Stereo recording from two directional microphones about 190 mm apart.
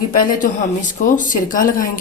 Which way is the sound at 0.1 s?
45° left (ahead or behind).